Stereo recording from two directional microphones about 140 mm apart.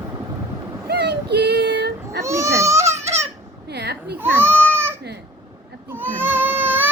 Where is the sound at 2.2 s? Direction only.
20° right (ahead or behind).